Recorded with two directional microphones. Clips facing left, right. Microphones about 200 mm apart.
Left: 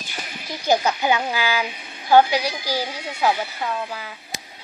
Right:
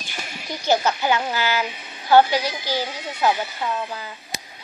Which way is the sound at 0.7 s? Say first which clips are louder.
Left 1 dB; 15° left (ahead or behind).